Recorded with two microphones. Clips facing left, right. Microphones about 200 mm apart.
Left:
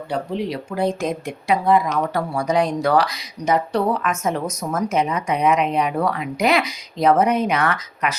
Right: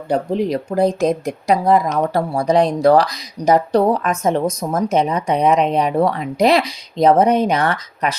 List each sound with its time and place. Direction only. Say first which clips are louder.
0.1 s speech: right 6 dB; 45° right (ahead or behind)